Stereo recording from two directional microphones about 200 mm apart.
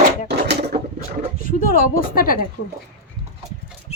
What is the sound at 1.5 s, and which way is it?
Speech, 45° left (ahead or behind).